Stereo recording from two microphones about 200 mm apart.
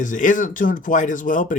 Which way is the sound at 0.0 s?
40° left (ahead or behind).